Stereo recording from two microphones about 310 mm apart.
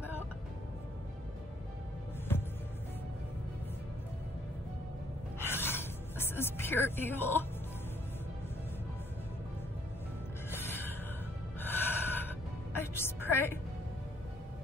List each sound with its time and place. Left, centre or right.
2.3 s music: centre
5.5 s music: centre
10.5 s music: centre
11.6 s gasp: centre
12.7 s music: centre